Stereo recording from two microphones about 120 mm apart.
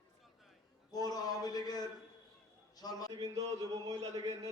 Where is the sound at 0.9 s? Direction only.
30° left (ahead or behind).